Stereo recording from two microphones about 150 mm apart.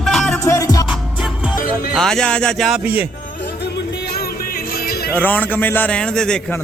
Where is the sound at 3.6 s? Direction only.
90° left.